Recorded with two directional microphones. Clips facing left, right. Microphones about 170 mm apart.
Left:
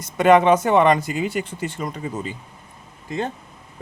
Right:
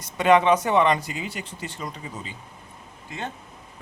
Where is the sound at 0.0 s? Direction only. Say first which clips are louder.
Left 4 dB; 50° left (ahead or behind).